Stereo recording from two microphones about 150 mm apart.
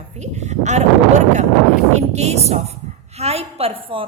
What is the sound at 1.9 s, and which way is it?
A woman's voice, 45° right (ahead or behind).